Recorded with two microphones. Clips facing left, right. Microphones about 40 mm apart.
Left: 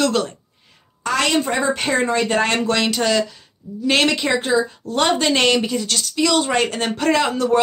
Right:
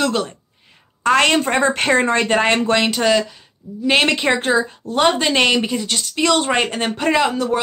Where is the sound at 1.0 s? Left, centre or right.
Right.